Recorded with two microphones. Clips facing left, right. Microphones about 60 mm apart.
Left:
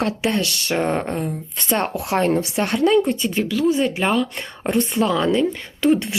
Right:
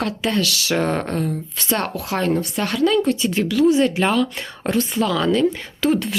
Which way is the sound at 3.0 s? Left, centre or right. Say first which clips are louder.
Right 1 dB; centre.